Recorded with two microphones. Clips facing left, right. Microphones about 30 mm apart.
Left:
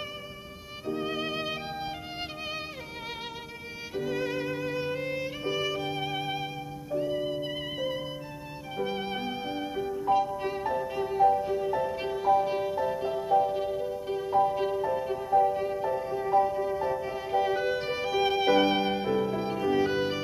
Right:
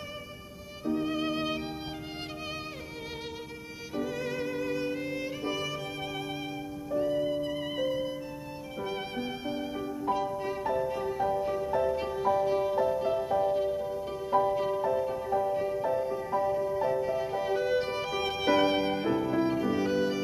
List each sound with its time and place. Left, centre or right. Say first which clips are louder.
0.8 s music: right 2 dB; centre
3.9 s violin: left 2 dB; centre
6.9 s music: right 1 dB; centre
10.3 s music: even; centre
16.7 s violin: right 2 dB; centre